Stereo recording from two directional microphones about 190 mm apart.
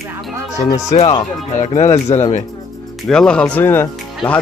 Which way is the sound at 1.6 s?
35° left (ahead or behind).